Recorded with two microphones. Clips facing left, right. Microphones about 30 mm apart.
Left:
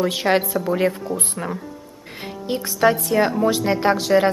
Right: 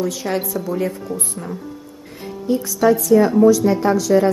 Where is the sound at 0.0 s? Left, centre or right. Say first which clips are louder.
Left 3 dB; left.